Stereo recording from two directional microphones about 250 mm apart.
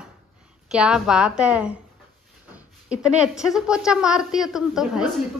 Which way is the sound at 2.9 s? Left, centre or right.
Centre.